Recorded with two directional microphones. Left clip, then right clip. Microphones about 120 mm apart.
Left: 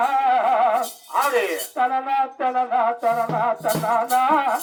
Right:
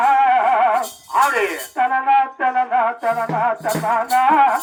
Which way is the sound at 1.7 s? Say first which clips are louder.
Right 6 dB; 35° left (ahead or behind).